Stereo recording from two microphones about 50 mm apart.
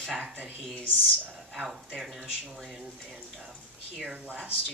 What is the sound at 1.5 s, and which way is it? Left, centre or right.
Speech, centre.